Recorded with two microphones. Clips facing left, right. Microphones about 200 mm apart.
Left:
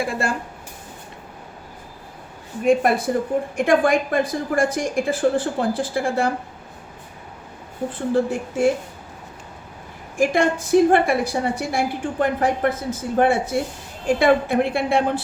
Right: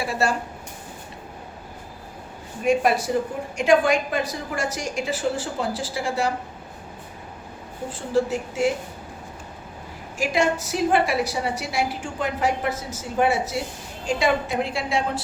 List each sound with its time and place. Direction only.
0.0 s a sound: 55° left (ahead or behind)
2.6 s a woman's voice: 55° left (ahead or behind)
7.9 s a woman's voice: 55° left (ahead or behind)
10.2 s a woman's voice: 55° left (ahead or behind)